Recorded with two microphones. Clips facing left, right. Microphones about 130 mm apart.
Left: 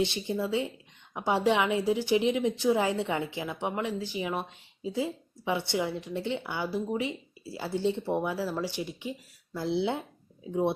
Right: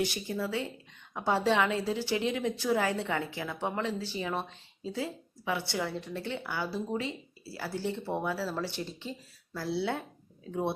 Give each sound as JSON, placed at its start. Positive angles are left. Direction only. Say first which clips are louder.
{"t": 0.0, "sound": "a woman's voice", "louder": "left 3 dB", "side_deg": 20}